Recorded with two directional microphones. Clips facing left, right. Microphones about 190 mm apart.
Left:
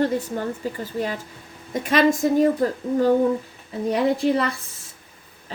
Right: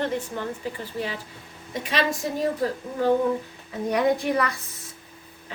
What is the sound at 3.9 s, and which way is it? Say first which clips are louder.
Speech: left 2 dB; 25° left (ahead or behind).